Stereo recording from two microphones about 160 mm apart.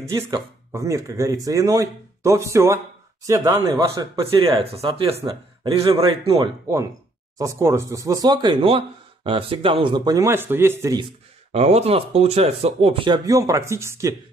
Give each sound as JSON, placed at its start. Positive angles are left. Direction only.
{"t": 0.0, "sound": "speech", "side_deg": -20}
{"t": 5.2, "sound": "speech", "side_deg": -25}
{"t": 6.2, "sound": "speech", "side_deg": -35}
{"t": 7.3, "sound": "speech", "side_deg": -20}
{"t": 11.5, "sound": "speech", "side_deg": -40}